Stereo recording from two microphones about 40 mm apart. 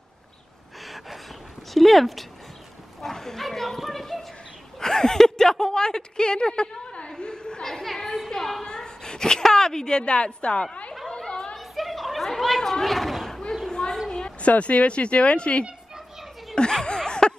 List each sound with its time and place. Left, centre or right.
0.8 s gasp: centre
1.7 s dog: centre
4.7 s a woman's voice: centre
7.1 s a sound: left
7.6 s chatter: centre
8.3 s a woman's voice: centre
8.6 s a woman's voice: centre
11.1 s chatter: left
11.5 s a sound: centre
12.3 s speech: centre
13.7 s a sound: centre
14.4 s speech: left
16.8 s a sound: left